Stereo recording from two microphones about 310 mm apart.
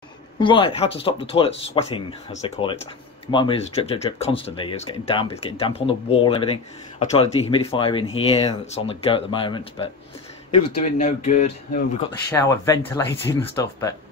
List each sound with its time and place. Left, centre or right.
0.4 s speech: centre
12.3 s speech: centre